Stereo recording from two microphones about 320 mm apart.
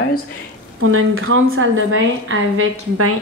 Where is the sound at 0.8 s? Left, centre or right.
Right.